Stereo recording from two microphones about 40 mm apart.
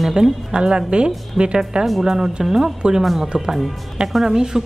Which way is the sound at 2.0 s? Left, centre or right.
Centre.